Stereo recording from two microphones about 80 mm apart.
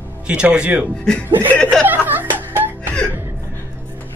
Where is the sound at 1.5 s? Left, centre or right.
Centre.